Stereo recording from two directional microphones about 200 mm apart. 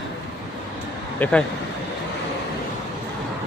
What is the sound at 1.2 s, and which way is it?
Speech, 10° left (ahead or behind).